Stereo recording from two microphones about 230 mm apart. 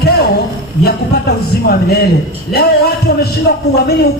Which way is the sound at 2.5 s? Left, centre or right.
Left.